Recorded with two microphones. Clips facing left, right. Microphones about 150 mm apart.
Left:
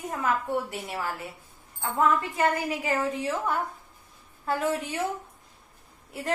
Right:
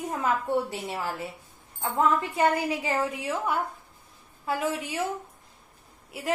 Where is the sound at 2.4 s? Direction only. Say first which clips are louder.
Right 2 dB; 15° right (ahead or behind).